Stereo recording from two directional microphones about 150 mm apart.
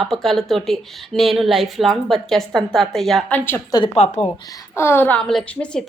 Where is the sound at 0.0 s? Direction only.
Centre (ahead or behind).